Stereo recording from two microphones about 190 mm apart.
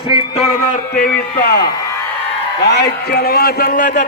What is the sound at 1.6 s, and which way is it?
Speech, 20° left (ahead or behind).